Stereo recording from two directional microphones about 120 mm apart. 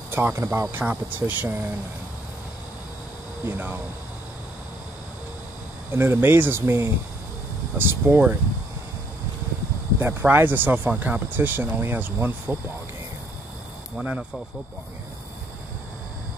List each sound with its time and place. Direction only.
0.1 s speech: 20° right (ahead or behind)
3.4 s speech: 15° right (ahead or behind)
5.9 s speech: 20° right (ahead or behind)
9.9 s speech: 15° right (ahead or behind)